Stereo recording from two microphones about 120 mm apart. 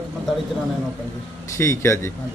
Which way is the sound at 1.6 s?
20° left (ahead or behind).